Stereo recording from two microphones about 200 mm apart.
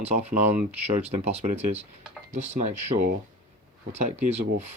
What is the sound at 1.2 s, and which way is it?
Speech, 30° right (ahead or behind).